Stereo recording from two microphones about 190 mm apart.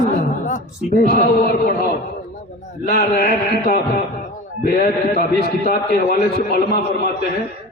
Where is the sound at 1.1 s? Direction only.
50° left (ahead or behind).